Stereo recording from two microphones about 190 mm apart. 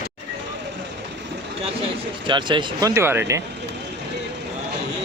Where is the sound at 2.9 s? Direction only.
10° right (ahead or behind).